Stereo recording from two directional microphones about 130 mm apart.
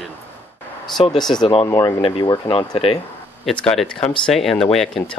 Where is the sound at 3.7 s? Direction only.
5° left (ahead or behind).